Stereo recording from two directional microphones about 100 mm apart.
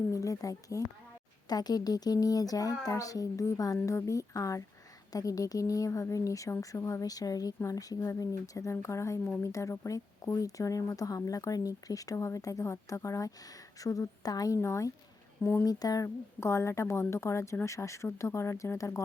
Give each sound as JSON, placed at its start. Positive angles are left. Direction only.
{"t": 0.1, "sound": "a woman's voice", "side_deg": 35}